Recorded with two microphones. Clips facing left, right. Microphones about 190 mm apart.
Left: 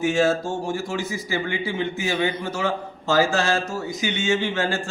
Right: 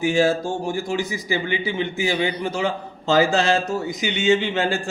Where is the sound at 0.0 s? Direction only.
15° right (ahead or behind).